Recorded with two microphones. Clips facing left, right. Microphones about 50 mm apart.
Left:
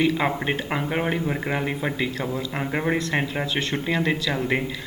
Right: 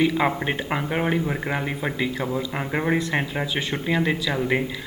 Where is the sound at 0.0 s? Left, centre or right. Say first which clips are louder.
Right 1 dB; centre.